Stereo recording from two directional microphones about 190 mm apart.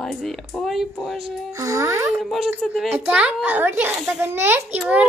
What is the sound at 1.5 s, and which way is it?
Speech, 15° right (ahead or behind).